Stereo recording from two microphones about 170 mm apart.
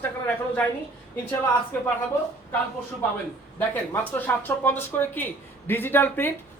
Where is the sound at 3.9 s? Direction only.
10° left (ahead or behind).